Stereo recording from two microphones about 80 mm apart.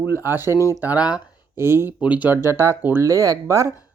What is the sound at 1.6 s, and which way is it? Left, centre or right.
Speech, right.